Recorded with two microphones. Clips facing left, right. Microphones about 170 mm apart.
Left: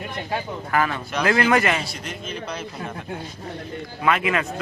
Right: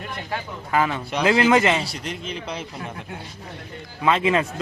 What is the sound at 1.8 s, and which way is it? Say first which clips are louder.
Speech: right 2 dB; 35° right (ahead or behind).